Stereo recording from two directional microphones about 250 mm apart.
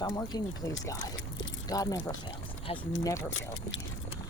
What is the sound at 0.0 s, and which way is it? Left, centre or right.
Speech, centre.